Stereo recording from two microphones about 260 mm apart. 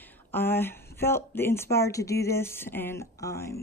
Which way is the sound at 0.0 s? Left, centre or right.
Centre.